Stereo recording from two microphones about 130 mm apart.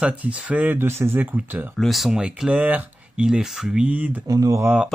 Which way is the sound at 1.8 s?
Centre (ahead or behind).